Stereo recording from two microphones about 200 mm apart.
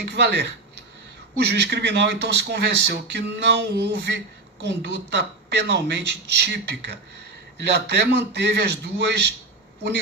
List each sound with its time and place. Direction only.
0.0 s speech: 55° right (ahead or behind)